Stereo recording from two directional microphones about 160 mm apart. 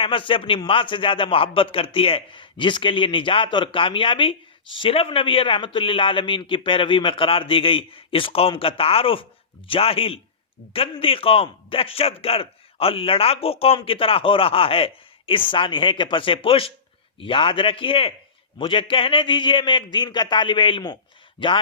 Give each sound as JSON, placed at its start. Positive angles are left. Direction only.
{"t": 0.0, "sound": "a man's voice", "side_deg": 35}